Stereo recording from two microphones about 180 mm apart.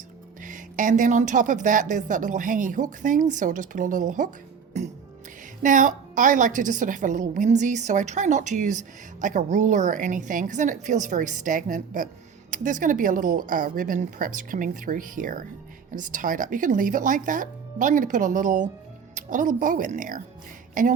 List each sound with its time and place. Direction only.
0.4 s speech: 45° right (ahead or behind)
4.7 s music: 40° right (ahead or behind)
5.6 s speech: 45° right (ahead or behind)